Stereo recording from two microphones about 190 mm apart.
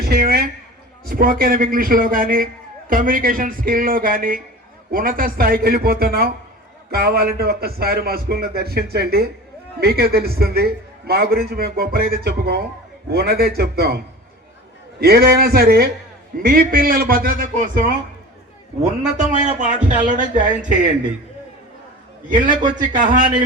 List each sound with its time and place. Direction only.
0.0 s a sound: 50° right (ahead or behind)
1.0 s a man's voice: 50° right (ahead or behind)
15.0 s a man's voice: 55° right (ahead or behind)
19.5 s speech: 40° right (ahead or behind)
22.3 s speech: 45° right (ahead or behind)